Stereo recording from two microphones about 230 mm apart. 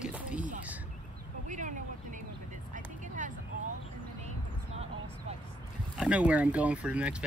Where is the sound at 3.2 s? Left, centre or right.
Right.